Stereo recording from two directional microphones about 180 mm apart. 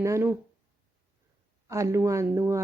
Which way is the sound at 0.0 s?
15° right (ahead or behind).